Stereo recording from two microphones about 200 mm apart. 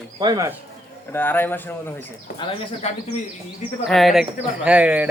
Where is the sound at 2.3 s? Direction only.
25° left (ahead or behind).